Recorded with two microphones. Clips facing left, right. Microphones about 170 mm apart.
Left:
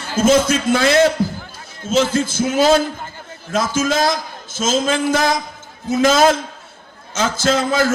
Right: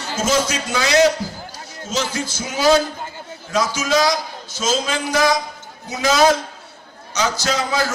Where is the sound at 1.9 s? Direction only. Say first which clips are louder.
Left 8 dB; 50° left (ahead or behind).